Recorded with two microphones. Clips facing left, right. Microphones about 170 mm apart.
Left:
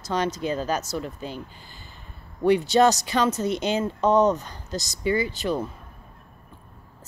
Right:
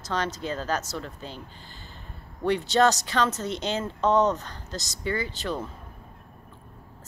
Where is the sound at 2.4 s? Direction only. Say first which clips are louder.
Left 4 dB; 10° left (ahead or behind).